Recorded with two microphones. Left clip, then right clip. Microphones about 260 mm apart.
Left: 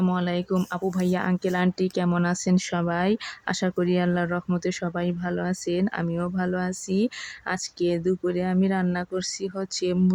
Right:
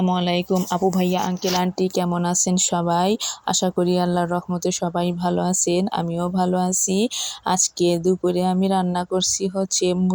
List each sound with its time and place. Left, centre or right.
0.0 s speech: centre
1.1 s a woman's voice: centre
1.5 s speech: centre